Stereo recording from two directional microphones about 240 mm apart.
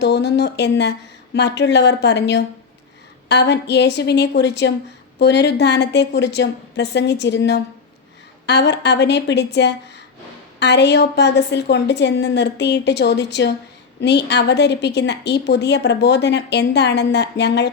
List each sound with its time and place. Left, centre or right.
0.0 s a woman's voice: left